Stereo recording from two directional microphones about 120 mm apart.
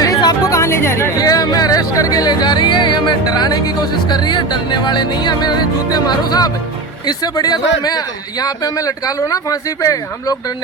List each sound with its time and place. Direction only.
0.0 s a man's voice: 30° left (ahead or behind)